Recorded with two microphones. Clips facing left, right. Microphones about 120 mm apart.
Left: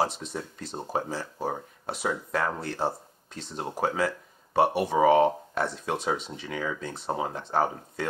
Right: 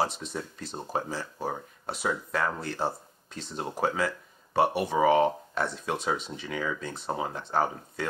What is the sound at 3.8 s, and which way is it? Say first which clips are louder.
Speech: left 1 dB; 35° left (ahead or behind).